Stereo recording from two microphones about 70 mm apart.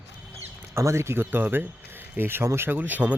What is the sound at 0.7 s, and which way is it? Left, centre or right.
Speech, right.